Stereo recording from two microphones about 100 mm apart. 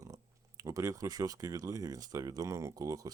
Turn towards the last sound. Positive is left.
turn(degrees=-35)  # may be behind; listen again after turning